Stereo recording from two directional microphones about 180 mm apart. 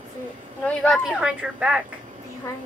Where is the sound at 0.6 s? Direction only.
10° left (ahead or behind).